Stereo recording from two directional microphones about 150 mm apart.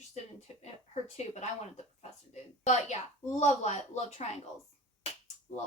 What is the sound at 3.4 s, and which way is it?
Speech, 50° left (ahead or behind).